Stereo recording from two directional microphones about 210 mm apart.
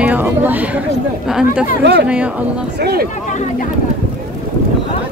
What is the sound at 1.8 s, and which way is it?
Speech, 55° right (ahead or behind).